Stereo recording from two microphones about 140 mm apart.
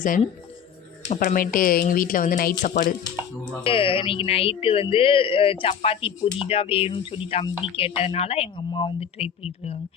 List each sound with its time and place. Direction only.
1.0 s speech: 60° left (ahead or behind)
3.6 s speech: 40° left (ahead or behind)